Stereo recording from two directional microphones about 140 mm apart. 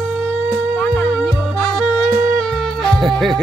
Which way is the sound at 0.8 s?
10° left (ahead or behind).